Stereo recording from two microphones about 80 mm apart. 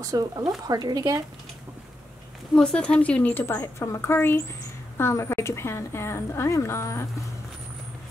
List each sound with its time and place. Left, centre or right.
0.0 s speech: right
2.5 s speech: centre
3.4 s a woman's voice: left